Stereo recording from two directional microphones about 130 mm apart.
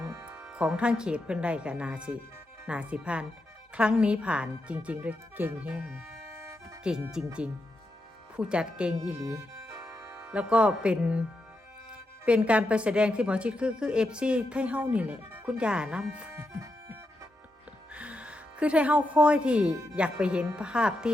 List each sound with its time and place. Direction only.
0.3 s a woman's voice: 10° right (ahead or behind)
6.3 s music: 25° right (ahead or behind)
6.8 s speech: 5° right (ahead or behind)
8.4 s a woman's voice: 5° right (ahead or behind)
10.1 s a woman's voice: 10° right (ahead or behind)
17.9 s a woman's voice: 10° right (ahead or behind)